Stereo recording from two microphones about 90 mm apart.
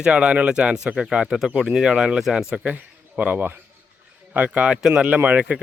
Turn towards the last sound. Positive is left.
turn(degrees=-15)  # may be behind; listen again after turning